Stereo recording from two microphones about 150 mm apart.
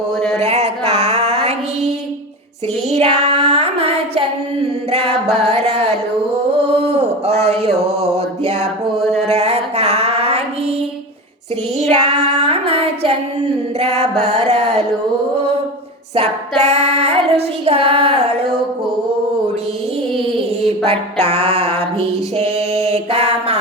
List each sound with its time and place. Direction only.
0.3 s music: 45° right (ahead or behind)
2.9 s child singing: 45° right (ahead or behind)
4.9 s music: 40° right (ahead or behind)
7.9 s mantra: 45° right (ahead or behind)
9.0 s a sound: centre (ahead or behind)
9.2 s music: 45° right (ahead or behind)
11.8 s a sound: 45° right (ahead or behind)
13.7 s music: 45° right (ahead or behind)
16.1 s child singing: 45° right (ahead or behind)
20.1 s a sound: 45° right (ahead or behind)
21.2 s mantra: 15° left (ahead or behind)
22.4 s mantra: 45° right (ahead or behind)